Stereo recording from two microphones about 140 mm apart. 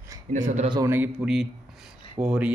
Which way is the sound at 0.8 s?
15° right (ahead or behind).